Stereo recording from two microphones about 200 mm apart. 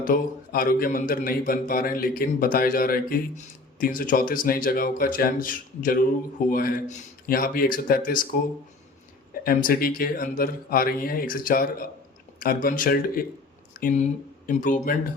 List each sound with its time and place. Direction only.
0.0 s a man's voice: 45° left (ahead or behind)
9.4 s a man's voice: 45° left (ahead or behind)